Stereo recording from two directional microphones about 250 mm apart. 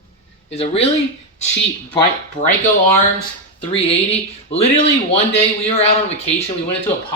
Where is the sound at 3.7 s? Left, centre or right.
Left.